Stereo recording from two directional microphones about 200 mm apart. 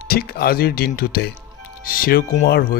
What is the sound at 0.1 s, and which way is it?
Speech, 50° left (ahead or behind).